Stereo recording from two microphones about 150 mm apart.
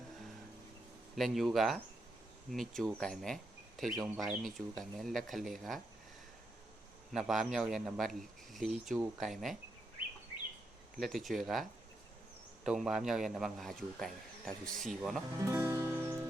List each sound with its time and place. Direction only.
1.1 s a man's voice: centre (ahead or behind)
7.1 s a man's voice: centre (ahead or behind)
11.0 s a man's voice: centre (ahead or behind)
15.4 s music: 15° right (ahead or behind)